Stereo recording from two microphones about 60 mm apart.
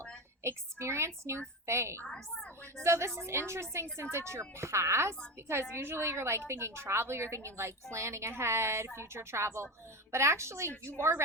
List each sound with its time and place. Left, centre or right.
0.4 s a woman's voice: right
2.0 s a woman's voice: centre
2.8 s a woman's voice: right